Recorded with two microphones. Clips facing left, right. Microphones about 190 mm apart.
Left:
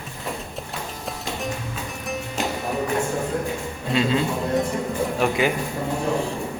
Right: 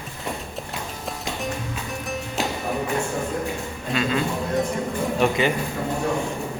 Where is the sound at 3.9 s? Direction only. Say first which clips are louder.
Left 2 dB; 25° left (ahead or behind).